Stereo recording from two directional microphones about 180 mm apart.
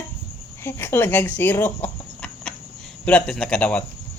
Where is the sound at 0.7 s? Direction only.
15° left (ahead or behind).